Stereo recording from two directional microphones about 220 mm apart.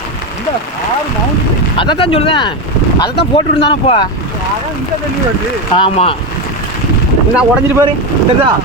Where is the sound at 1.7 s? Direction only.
20° left (ahead or behind).